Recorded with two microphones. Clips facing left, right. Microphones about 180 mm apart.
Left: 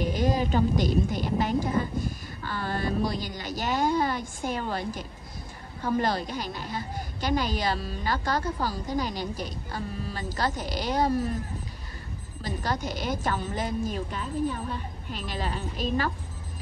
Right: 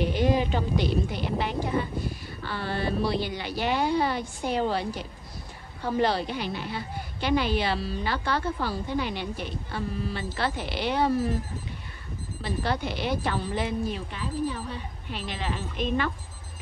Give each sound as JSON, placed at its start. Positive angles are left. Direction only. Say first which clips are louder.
{"t": 0.0, "sound": "a woman's voice", "louder": "right 2 dB", "side_deg": 45}
{"t": 12.4, "sound": "a woman's voice", "louder": "right 2 dB", "side_deg": 40}